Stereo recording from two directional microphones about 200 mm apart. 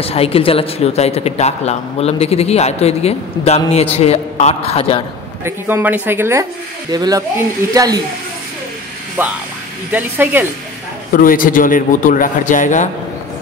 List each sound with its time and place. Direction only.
0.0 s speech: 30° left (ahead or behind)
5.4 s speech: 10° right (ahead or behind)
9.2 s speech: 10° right (ahead or behind)
11.1 s a man's voice: 45° left (ahead or behind)